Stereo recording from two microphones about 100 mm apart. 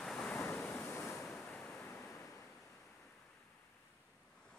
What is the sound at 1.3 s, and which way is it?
Waves, 10° left (ahead or behind).